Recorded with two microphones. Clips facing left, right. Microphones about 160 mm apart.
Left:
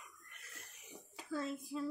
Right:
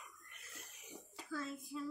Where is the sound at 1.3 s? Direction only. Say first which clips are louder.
Left 4 dB; 25° left (ahead or behind).